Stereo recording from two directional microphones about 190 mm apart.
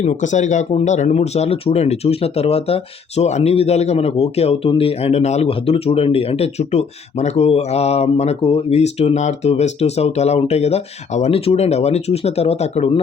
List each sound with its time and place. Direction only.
0.0 s speech: 40° left (ahead or behind)